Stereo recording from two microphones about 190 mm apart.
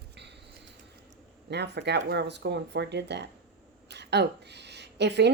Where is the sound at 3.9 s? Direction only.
60° right (ahead or behind).